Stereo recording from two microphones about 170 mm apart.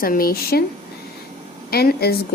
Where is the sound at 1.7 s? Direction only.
65° left (ahead or behind).